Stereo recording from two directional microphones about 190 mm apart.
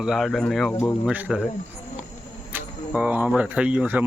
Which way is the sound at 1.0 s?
5° right (ahead or behind).